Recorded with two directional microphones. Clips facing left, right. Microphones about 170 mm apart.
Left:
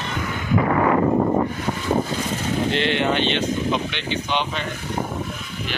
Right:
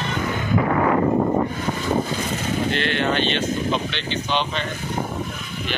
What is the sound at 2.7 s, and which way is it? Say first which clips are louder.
Speech: left 2 dB; 20° left (ahead or behind).